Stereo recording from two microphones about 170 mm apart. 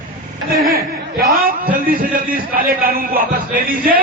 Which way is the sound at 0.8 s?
60° right (ahead or behind).